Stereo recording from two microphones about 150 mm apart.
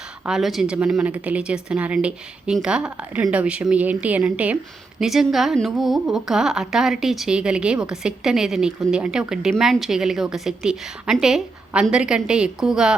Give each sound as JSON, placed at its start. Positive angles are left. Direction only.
{"t": 0.3, "sound": "a woman's voice", "side_deg": 0}